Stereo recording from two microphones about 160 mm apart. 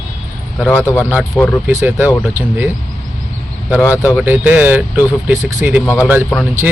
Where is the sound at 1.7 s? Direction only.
15° right (ahead or behind).